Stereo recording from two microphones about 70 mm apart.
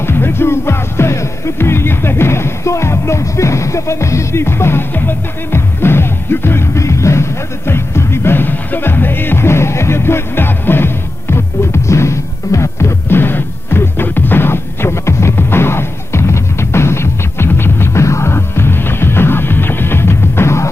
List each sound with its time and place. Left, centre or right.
0.0 s music: left